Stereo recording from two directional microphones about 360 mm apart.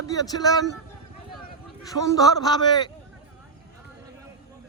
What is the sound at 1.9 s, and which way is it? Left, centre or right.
A man's voice, centre.